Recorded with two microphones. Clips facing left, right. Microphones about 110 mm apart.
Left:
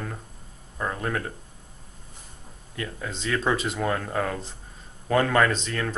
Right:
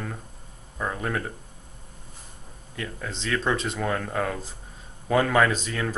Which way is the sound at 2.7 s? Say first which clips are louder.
Left 1 dB; centre (ahead or behind).